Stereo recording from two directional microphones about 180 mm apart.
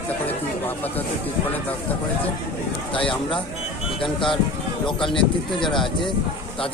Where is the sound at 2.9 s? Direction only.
30° left (ahead or behind).